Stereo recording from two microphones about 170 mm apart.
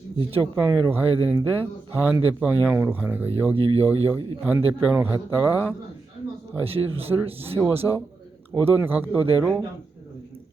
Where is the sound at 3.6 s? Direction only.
35° right (ahead or behind).